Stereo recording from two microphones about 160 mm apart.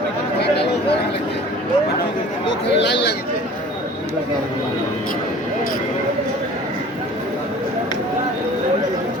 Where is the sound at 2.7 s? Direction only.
90° left.